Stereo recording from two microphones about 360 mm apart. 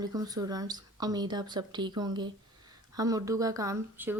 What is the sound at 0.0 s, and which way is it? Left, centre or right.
Speech, centre.